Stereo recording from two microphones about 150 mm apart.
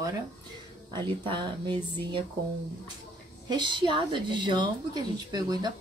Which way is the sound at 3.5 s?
30° right (ahead or behind).